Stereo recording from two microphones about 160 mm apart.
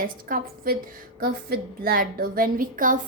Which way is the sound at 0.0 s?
60° right (ahead or behind).